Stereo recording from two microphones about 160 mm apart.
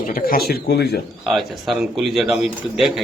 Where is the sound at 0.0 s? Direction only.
60° left (ahead or behind).